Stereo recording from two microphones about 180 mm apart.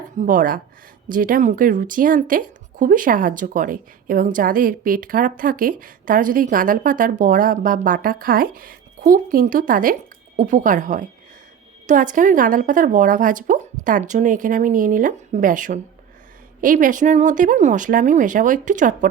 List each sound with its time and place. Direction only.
0.2 s a woman's voice: 50° right (ahead or behind)